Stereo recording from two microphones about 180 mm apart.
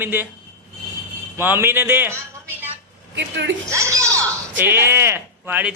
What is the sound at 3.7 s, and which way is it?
Speech, 15° right (ahead or behind).